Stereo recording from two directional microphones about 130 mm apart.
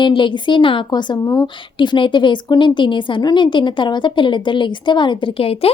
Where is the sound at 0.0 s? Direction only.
40° left (ahead or behind).